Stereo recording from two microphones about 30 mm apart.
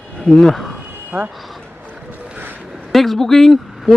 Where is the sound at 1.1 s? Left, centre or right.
Right.